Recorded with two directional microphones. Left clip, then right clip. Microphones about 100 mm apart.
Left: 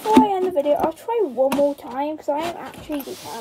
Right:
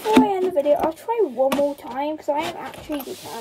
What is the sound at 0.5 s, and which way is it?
Speech, 15° left (ahead or behind).